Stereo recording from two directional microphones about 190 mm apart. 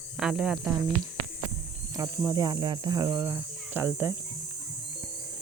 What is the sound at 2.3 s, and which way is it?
Speech, 20° right (ahead or behind).